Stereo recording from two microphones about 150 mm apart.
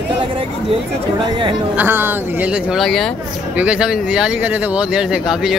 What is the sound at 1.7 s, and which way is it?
Speech, 15° right (ahead or behind).